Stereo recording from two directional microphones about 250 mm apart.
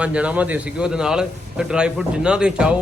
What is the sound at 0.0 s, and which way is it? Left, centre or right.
A man's voice, centre.